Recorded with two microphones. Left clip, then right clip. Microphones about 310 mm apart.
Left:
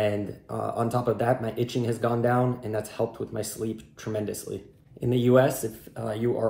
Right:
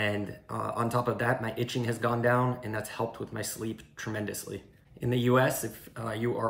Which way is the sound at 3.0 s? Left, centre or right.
Right.